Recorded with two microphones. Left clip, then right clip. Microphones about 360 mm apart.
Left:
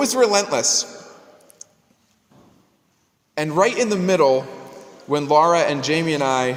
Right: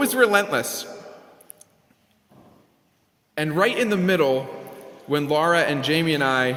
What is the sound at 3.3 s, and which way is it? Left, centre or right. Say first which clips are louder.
Speech: left 3 dB; centre.